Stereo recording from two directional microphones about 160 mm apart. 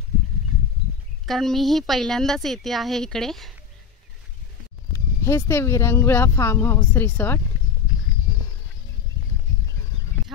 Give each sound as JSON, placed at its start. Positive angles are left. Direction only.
{"t": 1.2, "sound": "a woman's voice", "side_deg": 0}
{"t": 4.9, "sound": "speech", "side_deg": 15}